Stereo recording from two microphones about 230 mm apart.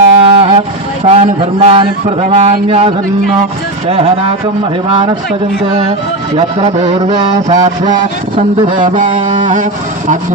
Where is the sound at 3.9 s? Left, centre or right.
Right.